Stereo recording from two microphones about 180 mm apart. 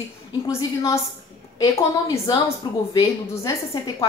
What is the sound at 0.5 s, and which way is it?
A woman's voice, 15° left (ahead or behind).